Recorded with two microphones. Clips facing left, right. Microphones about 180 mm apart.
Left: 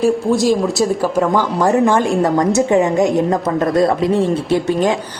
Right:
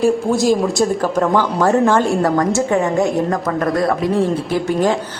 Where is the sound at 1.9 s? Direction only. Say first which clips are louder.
Even; 15° left (ahead or behind).